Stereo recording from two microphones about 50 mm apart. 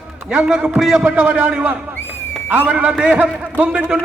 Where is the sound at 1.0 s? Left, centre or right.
Right.